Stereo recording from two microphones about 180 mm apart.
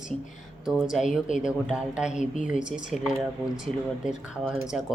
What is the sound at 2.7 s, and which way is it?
Speech, 45° left (ahead or behind).